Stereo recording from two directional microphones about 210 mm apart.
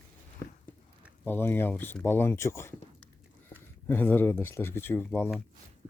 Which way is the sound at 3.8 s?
10° left (ahead or behind).